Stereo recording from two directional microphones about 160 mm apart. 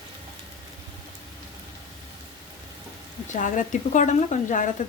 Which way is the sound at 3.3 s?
55° left (ahead or behind).